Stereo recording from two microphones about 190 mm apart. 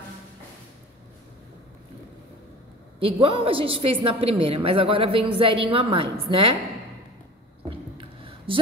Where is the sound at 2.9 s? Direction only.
30° right (ahead or behind).